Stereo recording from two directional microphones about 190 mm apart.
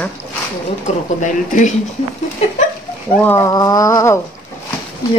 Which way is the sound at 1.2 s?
40° left (ahead or behind).